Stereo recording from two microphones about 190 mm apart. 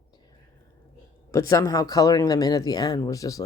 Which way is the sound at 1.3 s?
15° left (ahead or behind).